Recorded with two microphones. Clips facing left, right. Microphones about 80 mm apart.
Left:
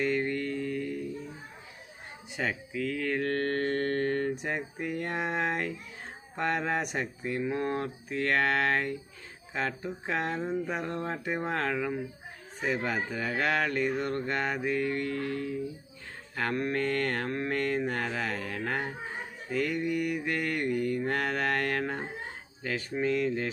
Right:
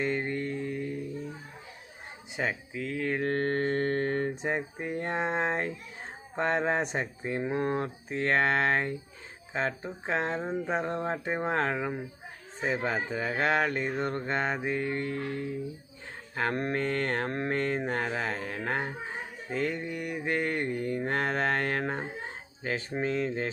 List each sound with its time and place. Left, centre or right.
0.0 s music: right
2.3 s mantra: right